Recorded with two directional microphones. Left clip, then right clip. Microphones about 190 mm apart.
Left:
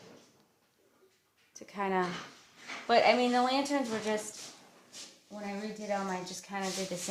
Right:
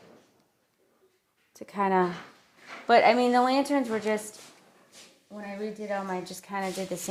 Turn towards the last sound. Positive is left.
turn(degrees=-40)  # may be behind; listen again after turning